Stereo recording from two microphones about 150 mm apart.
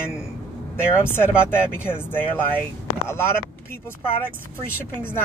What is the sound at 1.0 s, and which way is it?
Speech, 15° left (ahead or behind).